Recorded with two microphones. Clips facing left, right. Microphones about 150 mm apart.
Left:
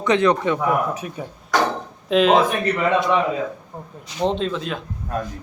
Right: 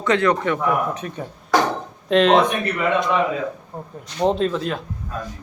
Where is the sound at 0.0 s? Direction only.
20° left (ahead or behind).